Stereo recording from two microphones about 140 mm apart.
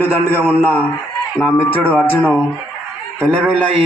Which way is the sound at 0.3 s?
10° right (ahead or behind).